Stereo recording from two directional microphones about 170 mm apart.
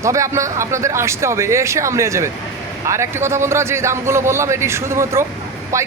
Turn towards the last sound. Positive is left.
turn(degrees=-15)  # may be behind; listen again after turning